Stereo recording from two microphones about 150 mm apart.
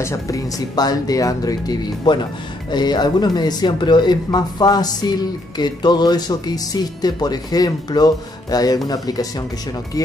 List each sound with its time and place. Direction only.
0.0 s speech: 20° left (ahead or behind)